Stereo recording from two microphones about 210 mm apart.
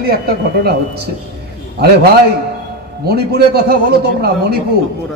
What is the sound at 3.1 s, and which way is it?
Speech, 50° right (ahead or behind).